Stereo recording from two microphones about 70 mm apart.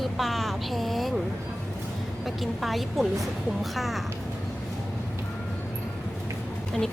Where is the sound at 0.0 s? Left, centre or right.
Centre.